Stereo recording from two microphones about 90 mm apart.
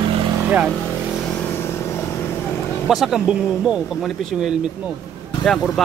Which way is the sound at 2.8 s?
5° right (ahead or behind).